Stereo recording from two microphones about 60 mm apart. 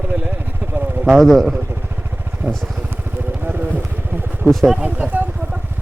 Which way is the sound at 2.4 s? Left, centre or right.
Centre.